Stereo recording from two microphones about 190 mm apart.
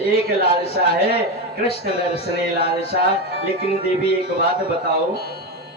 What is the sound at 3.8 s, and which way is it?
Speech, 30° left (ahead or behind).